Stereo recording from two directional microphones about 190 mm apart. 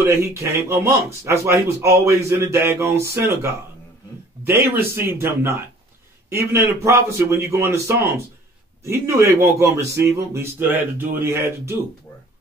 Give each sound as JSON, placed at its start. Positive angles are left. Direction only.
{"t": 0.4, "sound": "a man's voice", "side_deg": -15}